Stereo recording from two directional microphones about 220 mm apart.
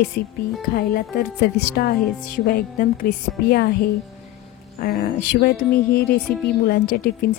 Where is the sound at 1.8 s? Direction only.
45° left (ahead or behind).